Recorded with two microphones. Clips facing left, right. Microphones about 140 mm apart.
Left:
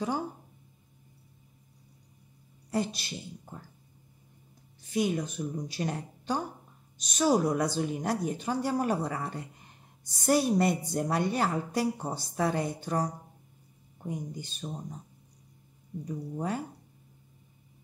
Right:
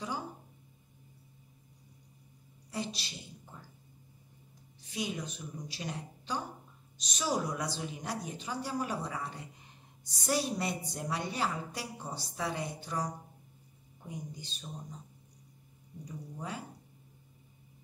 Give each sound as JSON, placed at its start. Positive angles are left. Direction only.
{"t": 2.7, "sound": "a woman's voice", "side_deg": 55}
{"t": 4.9, "sound": "a woman's voice", "side_deg": 55}
{"t": 16.1, "sound": "a woman's voice", "side_deg": 50}